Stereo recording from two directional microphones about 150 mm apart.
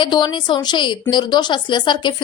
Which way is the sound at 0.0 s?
30° left (ahead or behind).